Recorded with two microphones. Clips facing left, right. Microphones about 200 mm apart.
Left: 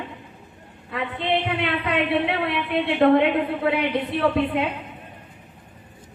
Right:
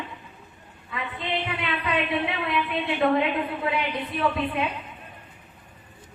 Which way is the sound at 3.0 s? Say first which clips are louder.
Left 6 dB; 55° left (ahead or behind).